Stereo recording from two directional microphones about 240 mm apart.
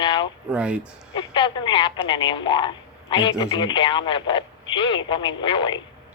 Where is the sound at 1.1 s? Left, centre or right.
Centre.